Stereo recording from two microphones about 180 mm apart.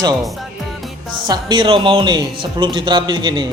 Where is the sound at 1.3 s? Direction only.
25° right (ahead or behind).